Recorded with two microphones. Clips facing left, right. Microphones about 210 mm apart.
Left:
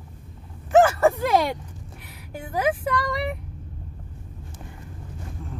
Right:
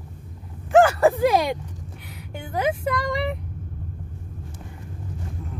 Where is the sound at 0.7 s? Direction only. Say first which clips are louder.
Right 1 dB; centre (ahead or behind).